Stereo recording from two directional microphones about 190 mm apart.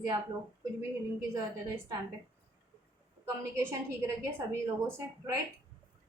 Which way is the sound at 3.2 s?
15° right (ahead or behind).